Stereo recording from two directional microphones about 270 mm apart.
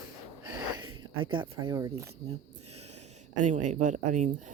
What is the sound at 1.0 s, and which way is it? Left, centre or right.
Speech, centre.